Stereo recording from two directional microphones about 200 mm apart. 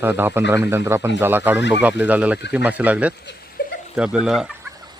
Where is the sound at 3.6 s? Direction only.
50° left (ahead or behind).